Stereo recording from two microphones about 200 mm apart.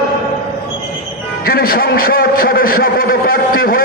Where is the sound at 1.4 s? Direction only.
50° left (ahead or behind).